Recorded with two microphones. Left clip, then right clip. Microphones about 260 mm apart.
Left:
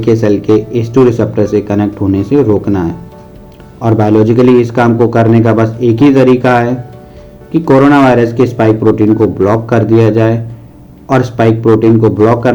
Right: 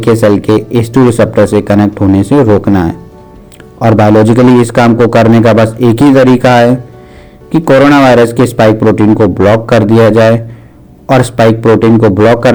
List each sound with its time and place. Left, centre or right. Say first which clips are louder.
0.0 s a man's voice: right 3 dB; right